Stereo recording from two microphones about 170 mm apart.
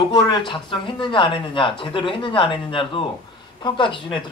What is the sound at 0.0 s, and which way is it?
Speech, 30° left (ahead or behind).